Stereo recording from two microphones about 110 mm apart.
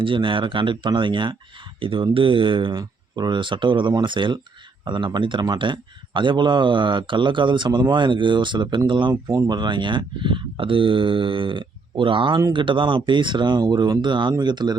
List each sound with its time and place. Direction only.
0.0 s a man's voice: 50° right (ahead or behind)
9.2 s a man's voice: 35° right (ahead or behind)